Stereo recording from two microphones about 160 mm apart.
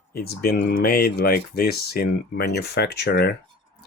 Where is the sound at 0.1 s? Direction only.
80° left.